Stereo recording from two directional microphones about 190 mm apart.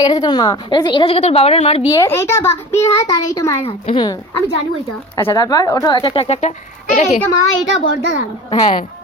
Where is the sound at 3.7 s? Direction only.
25° left (ahead or behind).